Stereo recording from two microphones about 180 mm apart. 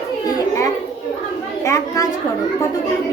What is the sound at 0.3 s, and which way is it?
Children playing, 20° left (ahead or behind).